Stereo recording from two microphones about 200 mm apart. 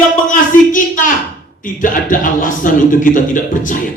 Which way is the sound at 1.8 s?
40° left (ahead or behind).